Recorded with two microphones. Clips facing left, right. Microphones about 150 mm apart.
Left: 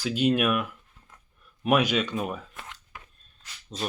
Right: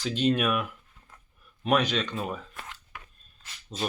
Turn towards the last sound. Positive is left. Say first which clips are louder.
# right 1 dB
turn(degrees=-5)  # may be behind; listen again after turning